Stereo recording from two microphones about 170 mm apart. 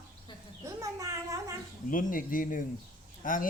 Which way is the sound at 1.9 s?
55° left (ahead or behind).